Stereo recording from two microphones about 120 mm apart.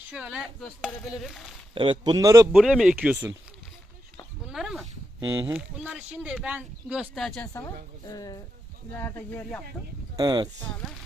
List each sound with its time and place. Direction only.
0.1 s speech: 5° right (ahead or behind)
1.7 s a man's voice: 45° right (ahead or behind)
2.1 s speech: 30° right (ahead or behind)
2.5 s speech: 5° right (ahead or behind)
4.4 s a sound: 5° right (ahead or behind)
5.2 s speech: 25° right (ahead or behind)
5.5 s speech: 10° right (ahead or behind)
7.2 s speech: 5° left (ahead or behind)
7.5 s a woman's voice: 25° left (ahead or behind)
9.0 s speech: 20° left (ahead or behind)
10.2 s speech: 35° right (ahead or behind)